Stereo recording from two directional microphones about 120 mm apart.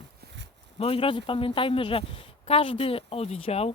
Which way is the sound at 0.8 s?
50° left (ahead or behind).